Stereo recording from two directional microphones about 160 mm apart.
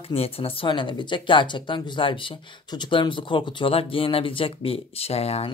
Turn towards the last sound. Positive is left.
turn(degrees=40)  # may be behind; listen again after turning